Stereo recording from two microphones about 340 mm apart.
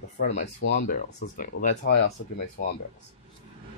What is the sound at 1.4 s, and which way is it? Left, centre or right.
Speech, left.